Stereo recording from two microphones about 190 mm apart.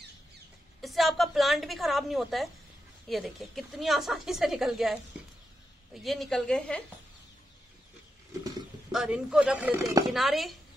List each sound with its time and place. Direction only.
0.7 s a woman's voice: centre (ahead or behind)
6.0 s a woman's voice: centre (ahead or behind)
8.9 s a woman's voice: 5° right (ahead or behind)